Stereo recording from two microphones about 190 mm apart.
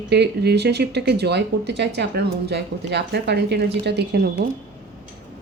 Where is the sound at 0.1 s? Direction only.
60° right (ahead or behind).